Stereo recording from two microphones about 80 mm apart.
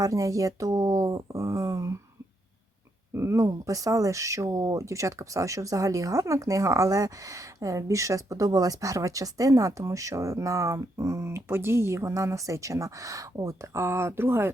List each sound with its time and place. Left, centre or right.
0.0 s speech: right
3.2 s speech: right